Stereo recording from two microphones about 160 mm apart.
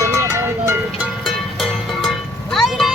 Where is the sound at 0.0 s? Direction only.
15° right (ahead or behind).